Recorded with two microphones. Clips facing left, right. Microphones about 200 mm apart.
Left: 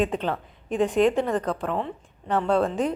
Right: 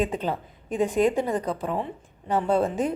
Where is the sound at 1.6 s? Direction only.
10° right (ahead or behind).